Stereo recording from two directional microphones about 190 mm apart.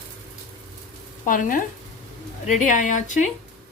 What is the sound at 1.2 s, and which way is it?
Speech, 45° left (ahead or behind).